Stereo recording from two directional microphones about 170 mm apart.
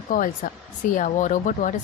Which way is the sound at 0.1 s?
55° left (ahead or behind).